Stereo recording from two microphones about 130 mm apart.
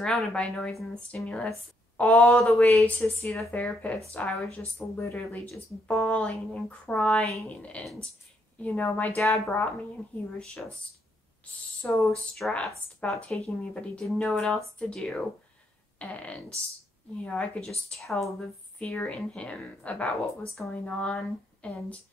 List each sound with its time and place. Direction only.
0.0 s speech: 5° left (ahead or behind)
5.9 s speech: 10° left (ahead or behind)
9.1 s speech: centre (ahead or behind)
11.8 s speech: 15° left (ahead or behind)
12.4 s speech: centre (ahead or behind)